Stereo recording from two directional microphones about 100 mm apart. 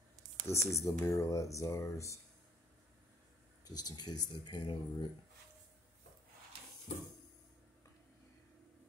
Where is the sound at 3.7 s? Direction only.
40° left (ahead or behind).